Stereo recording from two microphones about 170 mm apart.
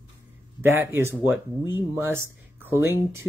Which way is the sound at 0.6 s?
15° right (ahead or behind).